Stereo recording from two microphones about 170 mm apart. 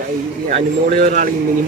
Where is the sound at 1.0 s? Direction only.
50° right (ahead or behind).